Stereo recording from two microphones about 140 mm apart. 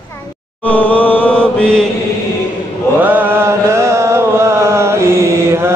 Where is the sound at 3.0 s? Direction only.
15° right (ahead or behind).